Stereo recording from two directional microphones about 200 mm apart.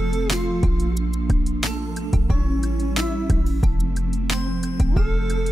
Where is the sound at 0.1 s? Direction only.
Centre (ahead or behind).